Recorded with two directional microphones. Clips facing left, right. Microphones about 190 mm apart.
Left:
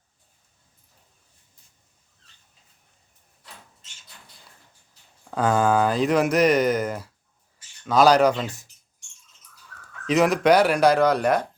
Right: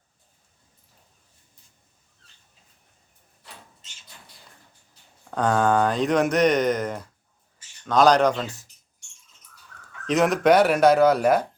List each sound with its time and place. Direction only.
5.3 s speech: 5° left (ahead or behind)
10.1 s speech: centre (ahead or behind)